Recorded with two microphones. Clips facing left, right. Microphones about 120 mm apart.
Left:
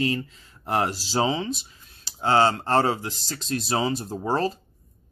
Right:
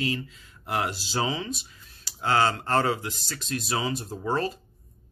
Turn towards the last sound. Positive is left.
turn(degrees=30)  # may be behind; listen again after turning